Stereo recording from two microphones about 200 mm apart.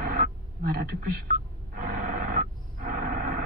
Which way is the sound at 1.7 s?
40° right (ahead or behind).